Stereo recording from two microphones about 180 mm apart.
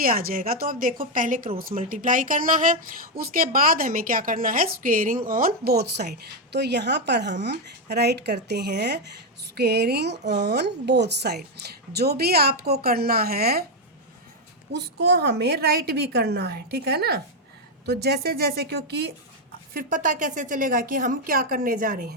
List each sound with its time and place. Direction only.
0.0 s a woman's voice: 55° right (ahead or behind)
14.7 s a woman's voice: 65° right (ahead or behind)
19.7 s a woman's voice: 45° right (ahead or behind)